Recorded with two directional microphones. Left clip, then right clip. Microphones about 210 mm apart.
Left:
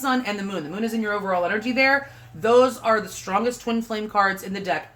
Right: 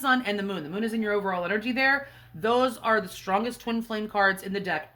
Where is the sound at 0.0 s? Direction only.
35° right (ahead or behind).